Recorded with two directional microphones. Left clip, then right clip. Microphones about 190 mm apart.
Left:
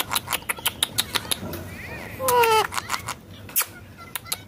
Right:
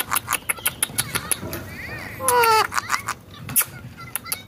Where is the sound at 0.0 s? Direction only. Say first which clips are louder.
Right 2 dB; 15° left (ahead or behind).